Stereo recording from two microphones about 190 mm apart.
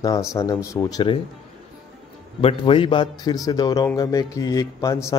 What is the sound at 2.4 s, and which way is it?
A man's voice, 25° left (ahead or behind).